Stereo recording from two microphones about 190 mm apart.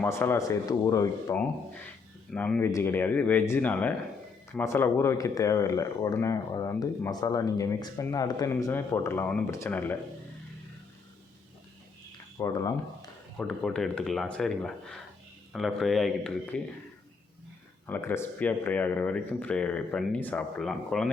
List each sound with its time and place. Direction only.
0.0 s speech: 15° left (ahead or behind)
12.4 s speech: 20° left (ahead or behind)
13.3 s speech: 5° left (ahead or behind)
17.8 s speech: 10° left (ahead or behind)